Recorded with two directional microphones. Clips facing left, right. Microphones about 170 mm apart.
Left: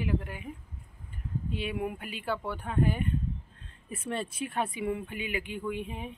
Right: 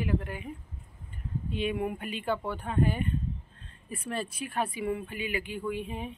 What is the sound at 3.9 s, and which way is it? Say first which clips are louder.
Speech: even; 25° left (ahead or behind).